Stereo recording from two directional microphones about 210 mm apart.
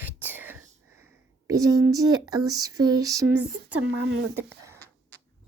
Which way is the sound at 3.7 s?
85° right.